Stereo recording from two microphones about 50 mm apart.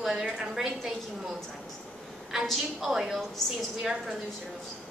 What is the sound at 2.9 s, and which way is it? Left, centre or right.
A woman's voice, centre.